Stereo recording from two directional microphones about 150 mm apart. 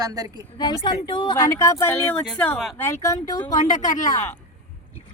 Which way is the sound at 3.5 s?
55° left (ahead or behind).